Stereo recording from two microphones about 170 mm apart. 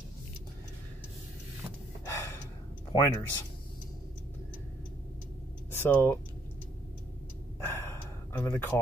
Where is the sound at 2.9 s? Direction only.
20° left (ahead or behind).